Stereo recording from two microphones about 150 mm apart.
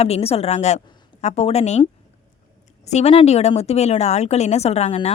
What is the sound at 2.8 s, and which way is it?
Speech, 45° left (ahead or behind).